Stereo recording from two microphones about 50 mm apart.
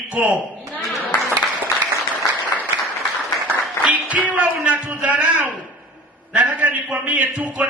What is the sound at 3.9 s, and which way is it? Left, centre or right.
A man's voice, right.